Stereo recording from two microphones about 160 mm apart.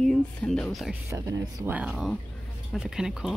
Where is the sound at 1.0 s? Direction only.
20° right (ahead or behind).